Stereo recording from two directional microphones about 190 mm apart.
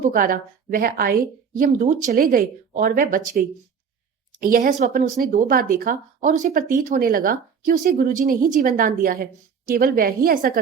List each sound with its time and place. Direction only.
0.0 s speech: 45° right (ahead or behind)